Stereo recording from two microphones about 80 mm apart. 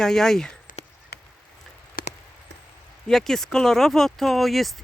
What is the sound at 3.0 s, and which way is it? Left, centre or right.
Speech, centre.